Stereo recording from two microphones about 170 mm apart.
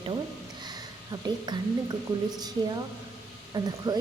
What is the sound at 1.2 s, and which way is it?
A woman's voice, 25° right (ahead or behind).